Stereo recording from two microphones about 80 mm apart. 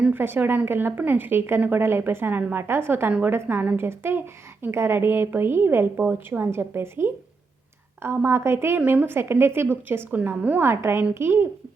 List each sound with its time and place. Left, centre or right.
0.1 s a woman's voice: right
10.2 s a woman's voice: centre; by 11.4 s right